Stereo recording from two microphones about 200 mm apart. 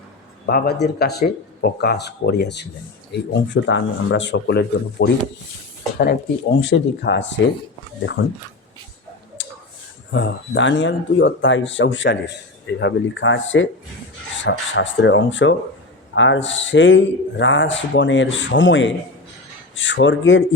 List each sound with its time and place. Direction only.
0.4 s speech: 50° left (ahead or behind)
6.6 s speech: 60° left (ahead or behind)
9.4 s a sound: 70° left (ahead or behind)
10.1 s speech: 65° left (ahead or behind)